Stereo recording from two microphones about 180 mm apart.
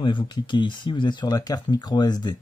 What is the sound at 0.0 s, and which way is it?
Speech, 25° left (ahead or behind).